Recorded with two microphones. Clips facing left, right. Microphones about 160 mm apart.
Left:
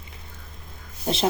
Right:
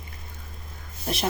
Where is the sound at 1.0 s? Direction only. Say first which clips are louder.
Left 4 dB; 25° left (ahead or behind).